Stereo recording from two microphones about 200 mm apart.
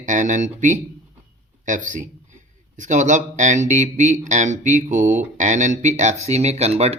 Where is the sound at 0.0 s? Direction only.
40° right (ahead or behind).